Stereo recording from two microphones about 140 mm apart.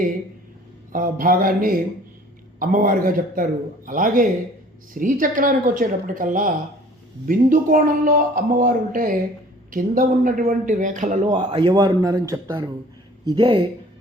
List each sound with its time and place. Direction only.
0.9 s a man's voice: 85° right; by 11.2 s 65° right (ahead or behind)
11.3 s a man's voice: 40° right (ahead or behind)